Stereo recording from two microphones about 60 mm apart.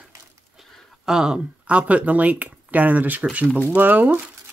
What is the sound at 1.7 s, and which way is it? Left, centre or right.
Speech, right.